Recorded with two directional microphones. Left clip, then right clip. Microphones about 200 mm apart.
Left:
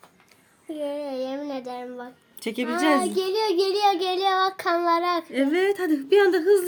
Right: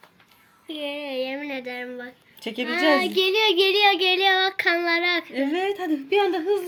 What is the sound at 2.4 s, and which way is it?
Speech, centre (ahead or behind).